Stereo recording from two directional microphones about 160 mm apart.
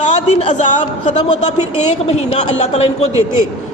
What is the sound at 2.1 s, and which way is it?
Speech, 45° left (ahead or behind).